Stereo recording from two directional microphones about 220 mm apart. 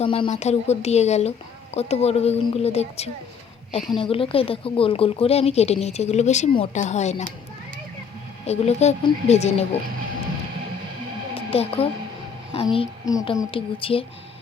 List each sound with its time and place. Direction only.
0.0 s speech: 25° left (ahead or behind)
8.4 s speech: 30° left (ahead or behind)
11.3 s speech: 25° left (ahead or behind)